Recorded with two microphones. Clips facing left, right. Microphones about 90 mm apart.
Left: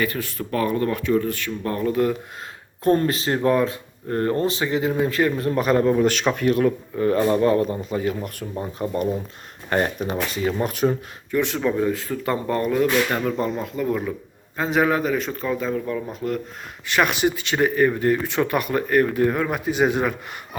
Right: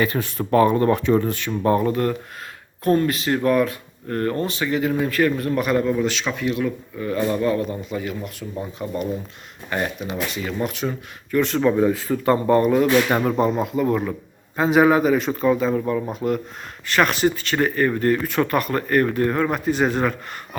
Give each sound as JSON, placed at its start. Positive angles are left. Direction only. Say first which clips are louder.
{"t": 0.0, "sound": "speech", "louder": "right 3 dB", "side_deg": -20}
{"t": 1.8, "sound": "speech", "louder": "even", "side_deg": 0}
{"t": 2.8, "sound": "a man's voice", "louder": "even", "side_deg": 35}
{"t": 9.6, "sound": "a man's voice", "louder": "left 3 dB", "side_deg": 40}
{"t": 11.3, "sound": "speech", "louder": "right 2 dB", "side_deg": 15}
{"t": 11.6, "sound": "speech", "louder": "right 4 dB", "side_deg": -5}
{"t": 13.1, "sound": "speech", "louder": "right 4 dB", "side_deg": -20}
{"t": 16.8, "sound": "speech", "louder": "right 1 dB", "side_deg": 15}